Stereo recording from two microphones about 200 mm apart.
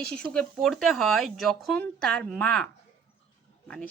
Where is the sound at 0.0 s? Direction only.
5° left (ahead or behind).